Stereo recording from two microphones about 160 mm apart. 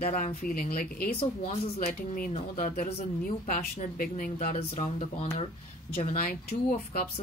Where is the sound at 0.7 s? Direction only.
65° left (ahead or behind).